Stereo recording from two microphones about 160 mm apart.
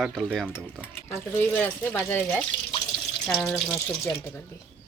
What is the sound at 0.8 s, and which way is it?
Speech, 10° left (ahead or behind).